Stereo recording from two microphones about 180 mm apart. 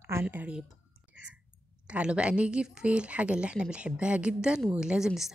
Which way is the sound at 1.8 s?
5° right (ahead or behind).